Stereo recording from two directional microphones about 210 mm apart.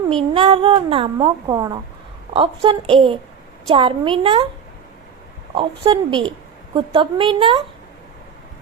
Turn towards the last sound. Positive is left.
turn(degrees=-20)  # may be behind; listen again after turning